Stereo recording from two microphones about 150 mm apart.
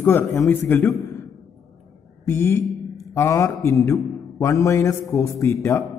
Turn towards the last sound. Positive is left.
turn(degrees=20)  # may be behind; listen again after turning